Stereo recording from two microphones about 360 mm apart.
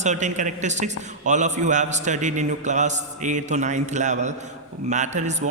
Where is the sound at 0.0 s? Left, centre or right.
Centre.